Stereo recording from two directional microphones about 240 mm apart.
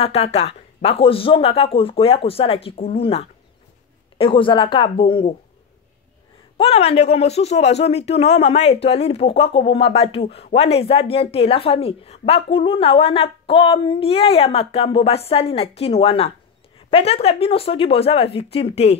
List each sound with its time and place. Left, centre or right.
0.0 s speech: left
6.5 s speech: left